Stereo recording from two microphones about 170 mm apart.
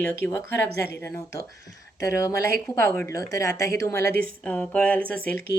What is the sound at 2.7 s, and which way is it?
A woman's voice, 10° left (ahead or behind).